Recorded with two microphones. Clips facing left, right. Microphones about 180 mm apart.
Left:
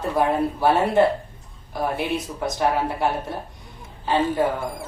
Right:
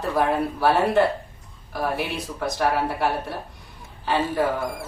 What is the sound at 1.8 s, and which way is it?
Speech, 20° left (ahead or behind).